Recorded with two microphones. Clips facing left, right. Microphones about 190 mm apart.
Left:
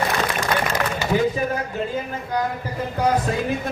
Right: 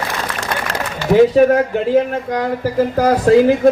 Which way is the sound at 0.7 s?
80° right.